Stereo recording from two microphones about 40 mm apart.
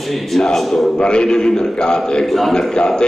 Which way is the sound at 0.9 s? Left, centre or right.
Left.